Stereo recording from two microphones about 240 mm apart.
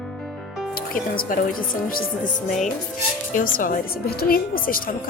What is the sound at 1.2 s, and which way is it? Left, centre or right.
A woman's voice, left.